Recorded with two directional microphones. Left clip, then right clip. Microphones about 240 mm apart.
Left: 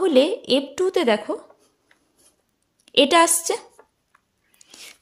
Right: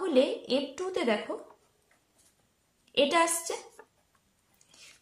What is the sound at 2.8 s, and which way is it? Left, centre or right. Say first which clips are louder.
A woman's voice: left 9 dB; left.